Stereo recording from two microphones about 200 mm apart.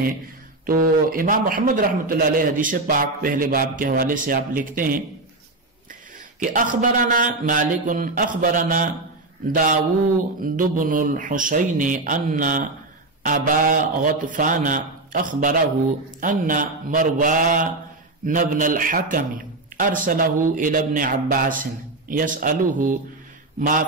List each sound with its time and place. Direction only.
0.7 s a man's voice: 45° right (ahead or behind)
6.4 s a man's voice: 40° right (ahead or behind)